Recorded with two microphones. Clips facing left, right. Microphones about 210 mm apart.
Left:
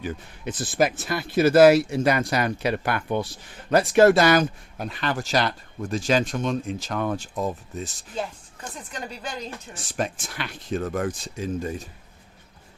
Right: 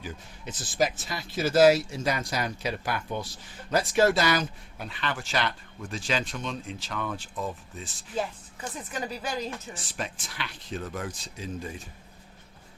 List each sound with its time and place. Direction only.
0.0 s speech: 60° left (ahead or behind); by 7.9 s 40° left (ahead or behind)
8.7 s speech: 5° right (ahead or behind)
10.0 s speech: 45° left (ahead or behind)